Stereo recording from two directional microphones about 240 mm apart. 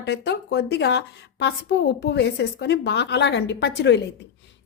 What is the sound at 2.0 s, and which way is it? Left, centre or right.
A woman's voice, left.